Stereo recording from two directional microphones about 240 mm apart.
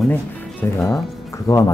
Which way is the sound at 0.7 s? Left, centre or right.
Centre.